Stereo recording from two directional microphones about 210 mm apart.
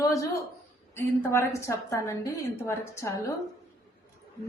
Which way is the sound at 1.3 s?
15° left (ahead or behind).